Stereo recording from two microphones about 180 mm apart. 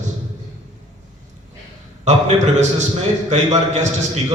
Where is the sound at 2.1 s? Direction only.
40° right (ahead or behind).